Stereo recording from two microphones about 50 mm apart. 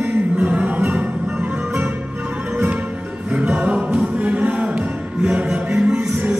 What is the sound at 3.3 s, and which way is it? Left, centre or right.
Music, right.